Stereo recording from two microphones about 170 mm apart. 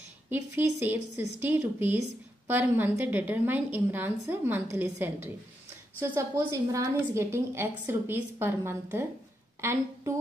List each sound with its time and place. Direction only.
0.3 s a woman's voice: 10° right (ahead or behind)